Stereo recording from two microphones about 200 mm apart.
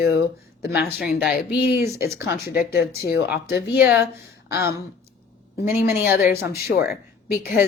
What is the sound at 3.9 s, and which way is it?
Speech, 10° right (ahead or behind).